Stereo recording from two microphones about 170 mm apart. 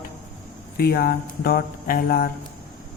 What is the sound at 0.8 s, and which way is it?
Speech, 60° left (ahead or behind).